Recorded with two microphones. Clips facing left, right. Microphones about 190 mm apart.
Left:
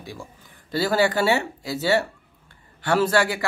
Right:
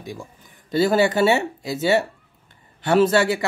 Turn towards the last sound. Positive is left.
turn(degrees=-20)  # may be behind; listen again after turning